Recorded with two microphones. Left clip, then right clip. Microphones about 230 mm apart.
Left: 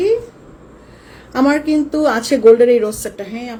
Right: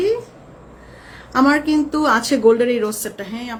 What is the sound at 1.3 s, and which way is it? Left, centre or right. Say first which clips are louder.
Speech: left 1 dB; centre.